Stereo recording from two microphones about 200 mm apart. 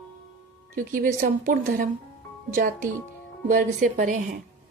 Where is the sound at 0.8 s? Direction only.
40° right (ahead or behind).